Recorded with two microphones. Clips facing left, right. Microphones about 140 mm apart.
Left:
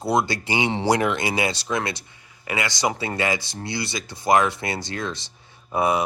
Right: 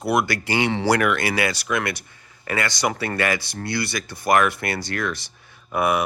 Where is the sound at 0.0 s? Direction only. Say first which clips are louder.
Right 1 dB; 25° left (ahead or behind).